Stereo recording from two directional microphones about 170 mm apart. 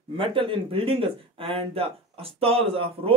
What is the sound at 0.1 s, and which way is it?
Speech, 30° right (ahead or behind).